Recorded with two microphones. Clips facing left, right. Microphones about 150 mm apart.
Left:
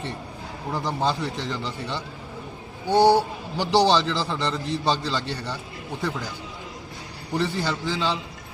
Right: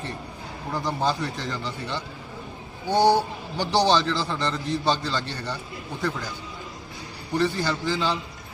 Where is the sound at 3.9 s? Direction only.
Centre (ahead or behind).